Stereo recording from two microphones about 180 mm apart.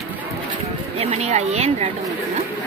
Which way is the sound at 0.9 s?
35° right (ahead or behind).